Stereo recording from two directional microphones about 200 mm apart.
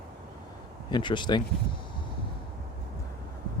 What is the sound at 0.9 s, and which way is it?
Speech, 25° left (ahead or behind).